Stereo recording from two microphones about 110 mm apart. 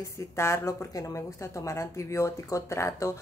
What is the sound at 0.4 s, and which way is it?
Speech, 25° left (ahead or behind).